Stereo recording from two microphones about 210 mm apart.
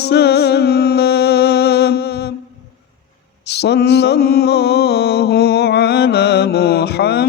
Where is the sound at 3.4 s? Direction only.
50° left (ahead or behind).